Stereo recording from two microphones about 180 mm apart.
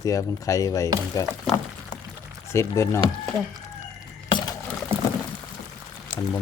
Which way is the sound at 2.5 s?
15° left (ahead or behind).